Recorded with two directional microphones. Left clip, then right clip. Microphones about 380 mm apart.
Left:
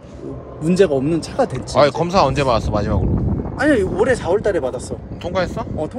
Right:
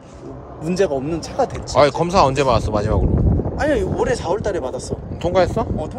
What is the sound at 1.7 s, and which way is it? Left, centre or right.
Speech, centre.